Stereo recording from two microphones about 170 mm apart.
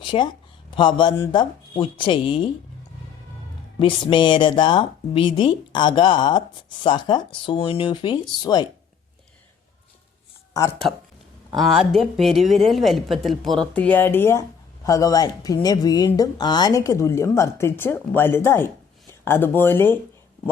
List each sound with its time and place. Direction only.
0.0 s speech: 30° left (ahead or behind)
3.8 s speech: 30° left (ahead or behind)
10.5 s speech: 20° left (ahead or behind)
11.5 s a woman's voice: centre (ahead or behind)